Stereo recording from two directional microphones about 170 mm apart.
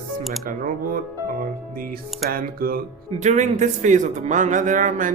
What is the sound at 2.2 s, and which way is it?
Speech, 60° right (ahead or behind).